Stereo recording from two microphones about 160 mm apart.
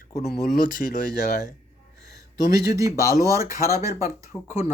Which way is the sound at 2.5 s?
20° right (ahead or behind).